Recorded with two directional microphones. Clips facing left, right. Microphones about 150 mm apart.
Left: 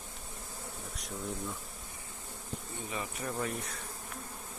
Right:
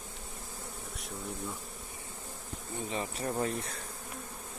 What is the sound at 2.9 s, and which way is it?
Bee, 30° right (ahead or behind).